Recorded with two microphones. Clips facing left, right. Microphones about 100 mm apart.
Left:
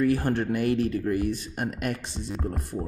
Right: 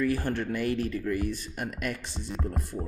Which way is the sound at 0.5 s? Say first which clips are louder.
Left 4 dB; 20° left (ahead or behind).